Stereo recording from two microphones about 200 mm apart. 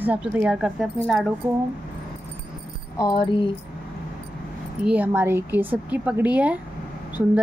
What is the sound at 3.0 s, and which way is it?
Speech, 20° left (ahead or behind).